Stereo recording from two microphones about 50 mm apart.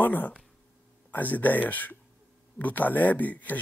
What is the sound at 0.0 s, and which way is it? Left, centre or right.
Speech, left.